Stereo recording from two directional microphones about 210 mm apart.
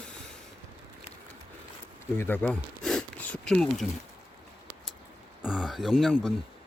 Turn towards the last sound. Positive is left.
turn(degrees=0)  # may be behind; listen again after turning